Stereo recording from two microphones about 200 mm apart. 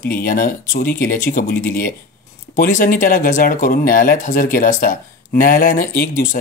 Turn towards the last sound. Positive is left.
turn(degrees=45)  # may be behind; listen again after turning